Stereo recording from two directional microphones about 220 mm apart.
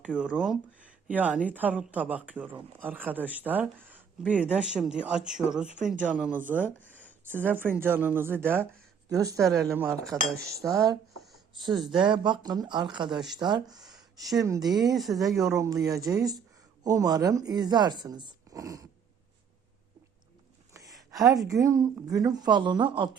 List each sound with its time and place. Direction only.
0.0 s speech: 5° right (ahead or behind)
14.9 s speech: centre (ahead or behind)
15.4 s speech: 15° right (ahead or behind)
20.7 s a sound: 15° right (ahead or behind)
21.4 s speech: 15° right (ahead or behind)